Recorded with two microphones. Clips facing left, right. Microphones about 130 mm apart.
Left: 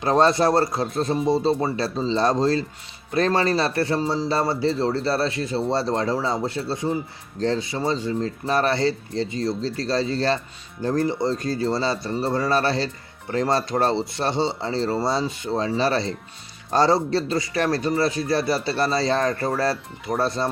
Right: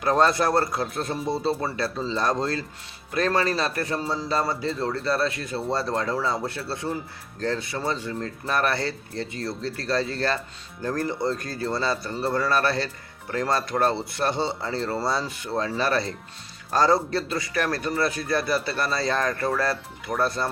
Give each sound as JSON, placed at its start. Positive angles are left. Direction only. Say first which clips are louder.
{"t": 0.0, "sound": "a man's voice", "louder": "left 3 dB", "side_deg": 25}